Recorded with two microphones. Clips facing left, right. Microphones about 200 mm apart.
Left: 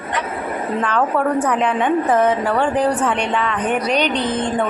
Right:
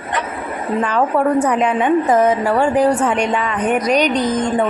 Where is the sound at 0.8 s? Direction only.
10° right (ahead or behind).